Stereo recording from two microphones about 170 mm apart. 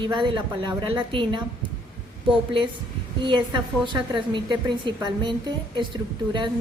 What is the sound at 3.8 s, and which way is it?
A woman's voice, 25° right (ahead or behind).